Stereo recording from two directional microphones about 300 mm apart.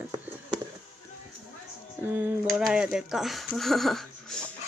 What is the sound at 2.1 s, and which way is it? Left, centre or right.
Speech, centre.